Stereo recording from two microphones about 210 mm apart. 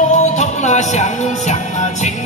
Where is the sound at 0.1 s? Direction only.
35° left (ahead or behind).